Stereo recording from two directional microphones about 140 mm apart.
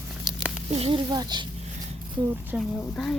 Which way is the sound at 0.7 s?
45° right (ahead or behind).